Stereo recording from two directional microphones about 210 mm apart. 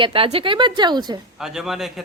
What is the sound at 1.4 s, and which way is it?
Speech, centre (ahead or behind).